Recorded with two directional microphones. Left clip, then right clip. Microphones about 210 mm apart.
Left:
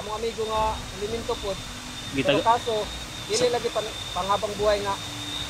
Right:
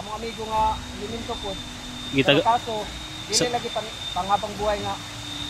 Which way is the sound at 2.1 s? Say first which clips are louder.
Right 4 dB; 30° right (ahead or behind).